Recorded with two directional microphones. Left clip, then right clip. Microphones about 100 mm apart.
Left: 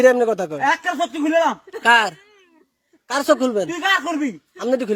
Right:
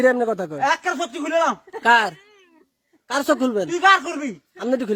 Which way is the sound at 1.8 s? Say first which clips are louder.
Left 1 dB; 25° right (ahead or behind).